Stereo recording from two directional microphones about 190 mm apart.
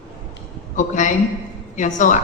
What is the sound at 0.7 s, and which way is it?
A man's voice, 40° left (ahead or behind).